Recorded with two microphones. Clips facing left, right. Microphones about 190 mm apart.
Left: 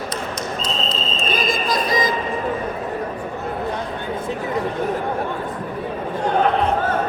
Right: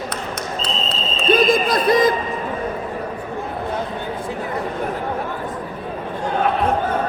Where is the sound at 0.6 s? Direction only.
65° right (ahead or behind).